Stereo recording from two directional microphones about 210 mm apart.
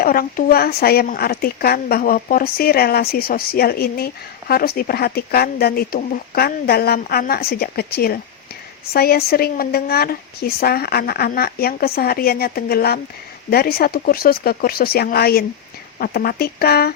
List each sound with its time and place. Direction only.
0.0 s speech: 45° left (ahead or behind)